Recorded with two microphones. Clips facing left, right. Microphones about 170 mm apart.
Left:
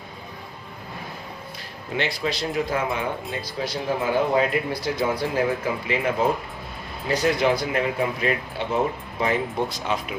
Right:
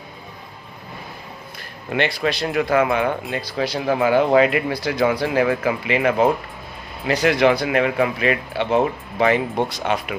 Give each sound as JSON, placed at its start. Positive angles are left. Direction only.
{"t": 1.9, "sound": "speech", "side_deg": -65}
{"t": 3.3, "sound": "speech", "side_deg": -80}